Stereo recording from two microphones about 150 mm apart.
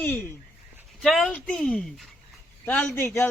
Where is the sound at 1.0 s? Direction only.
Centre (ahead or behind).